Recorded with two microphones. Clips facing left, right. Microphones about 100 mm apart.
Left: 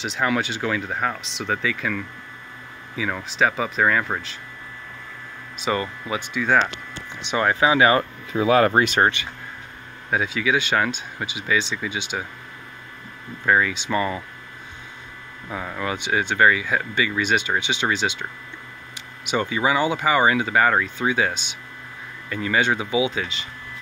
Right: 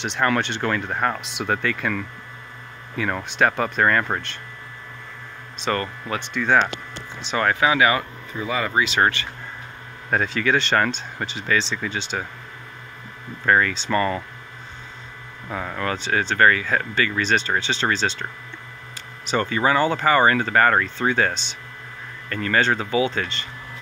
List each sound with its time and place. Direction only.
0.0 s speech: 5° left (ahead or behind)
5.6 s speech: 10° left (ahead or behind)
7.2 s speech: 20° left (ahead or behind)
8.3 s speech: 75° left (ahead or behind); by 9.0 s 50° left (ahead or behind)
9.0 s speech: 15° left (ahead or behind)
10.0 s speech: 5° left (ahead or behind)
13.5 s speech: 10° left (ahead or behind)
15.4 s speech: centre (ahead or behind)